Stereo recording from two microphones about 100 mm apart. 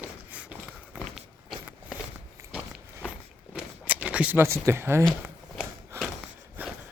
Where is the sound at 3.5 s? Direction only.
15° right (ahead or behind).